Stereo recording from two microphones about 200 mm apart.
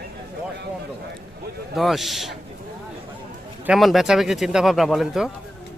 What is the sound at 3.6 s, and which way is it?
Speech, centre (ahead or behind).